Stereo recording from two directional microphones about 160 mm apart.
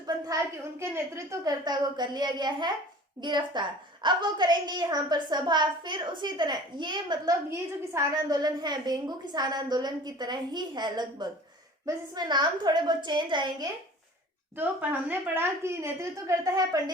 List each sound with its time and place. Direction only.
0.0 s a woman's voice: 20° right (ahead or behind)
14.5 s a woman's voice: 10° right (ahead or behind)